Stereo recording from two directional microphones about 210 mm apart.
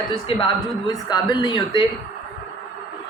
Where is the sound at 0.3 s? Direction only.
25° left (ahead or behind).